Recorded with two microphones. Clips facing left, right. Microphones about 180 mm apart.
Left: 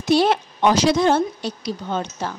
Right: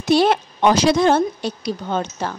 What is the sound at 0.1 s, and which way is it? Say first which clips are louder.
Speech: right 1 dB; 60° right (ahead or behind).